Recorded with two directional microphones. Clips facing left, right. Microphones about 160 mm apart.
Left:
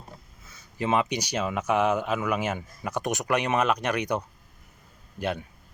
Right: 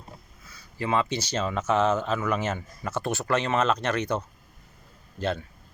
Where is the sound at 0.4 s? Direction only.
20° left (ahead or behind).